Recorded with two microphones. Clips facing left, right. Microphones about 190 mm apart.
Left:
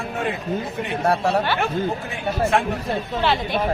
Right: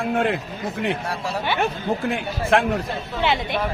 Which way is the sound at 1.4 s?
10° right (ahead or behind).